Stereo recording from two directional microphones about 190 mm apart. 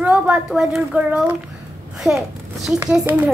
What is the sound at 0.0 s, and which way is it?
A child's voice, 5° right (ahead or behind).